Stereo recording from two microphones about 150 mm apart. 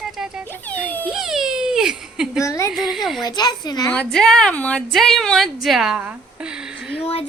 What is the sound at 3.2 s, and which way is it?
Speech, 30° left (ahead or behind).